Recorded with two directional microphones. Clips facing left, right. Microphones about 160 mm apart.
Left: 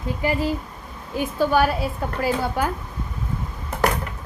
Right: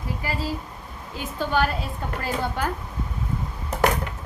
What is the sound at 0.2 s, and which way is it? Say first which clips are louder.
A woman's voice: left 8 dB; 20° left (ahead or behind).